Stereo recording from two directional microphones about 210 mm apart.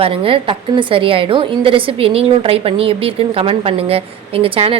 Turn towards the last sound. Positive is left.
turn(degrees=-25)  # may be behind; listen again after turning